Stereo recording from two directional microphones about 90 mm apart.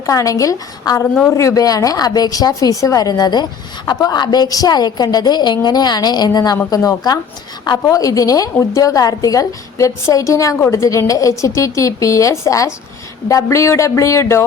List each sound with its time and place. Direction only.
0.0 s a woman's voice: 40° left (ahead or behind)